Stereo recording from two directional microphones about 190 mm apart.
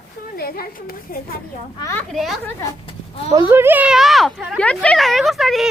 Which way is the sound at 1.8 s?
15° left (ahead or behind).